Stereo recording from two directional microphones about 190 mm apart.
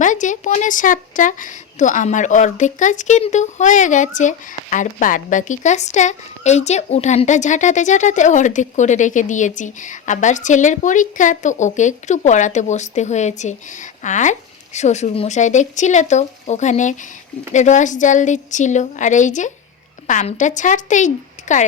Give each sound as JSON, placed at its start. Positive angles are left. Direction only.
{"t": 0.0, "sound": "a woman's voice", "side_deg": 40}